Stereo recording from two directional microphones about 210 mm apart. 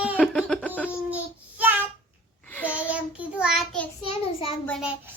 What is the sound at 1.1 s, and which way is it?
Child singing, 10° right (ahead or behind).